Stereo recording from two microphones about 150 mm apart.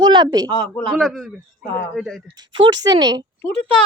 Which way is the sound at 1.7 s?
10° left (ahead or behind).